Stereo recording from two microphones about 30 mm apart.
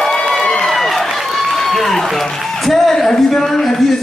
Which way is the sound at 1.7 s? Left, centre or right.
Centre.